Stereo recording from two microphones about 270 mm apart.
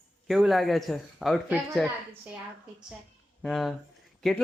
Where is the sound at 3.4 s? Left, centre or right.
Centre.